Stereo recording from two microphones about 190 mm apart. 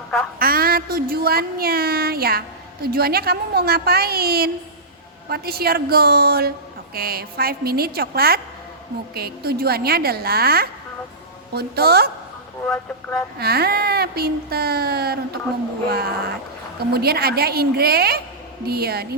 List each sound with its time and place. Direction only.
0.3 s speech: 50° right (ahead or behind)
12.6 s speech: 10° left (ahead or behind)
13.4 s speech: 55° right (ahead or behind)